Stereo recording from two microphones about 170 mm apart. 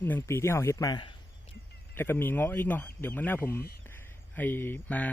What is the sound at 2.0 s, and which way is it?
Speech, 15° left (ahead or behind).